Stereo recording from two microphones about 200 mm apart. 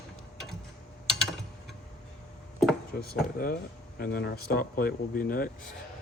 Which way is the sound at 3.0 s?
50° left (ahead or behind).